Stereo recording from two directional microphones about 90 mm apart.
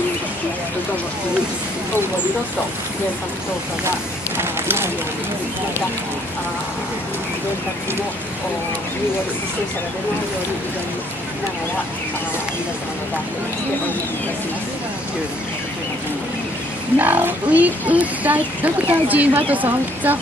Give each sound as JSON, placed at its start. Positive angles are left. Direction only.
{"t": 4.4, "sound": "run", "side_deg": -25}
{"t": 17.0, "sound": "a woman's voice", "side_deg": -20}